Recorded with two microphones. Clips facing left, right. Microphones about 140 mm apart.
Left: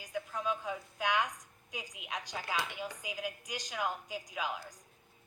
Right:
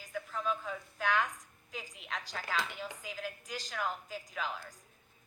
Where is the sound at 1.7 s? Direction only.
15° left (ahead or behind).